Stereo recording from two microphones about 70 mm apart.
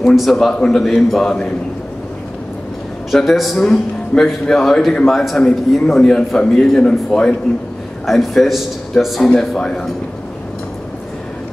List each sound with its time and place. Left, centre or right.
0.0 s a man's voice: centre
3.1 s a man's voice: centre